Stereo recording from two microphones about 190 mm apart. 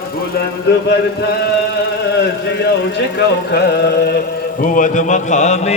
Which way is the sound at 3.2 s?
60° left (ahead or behind).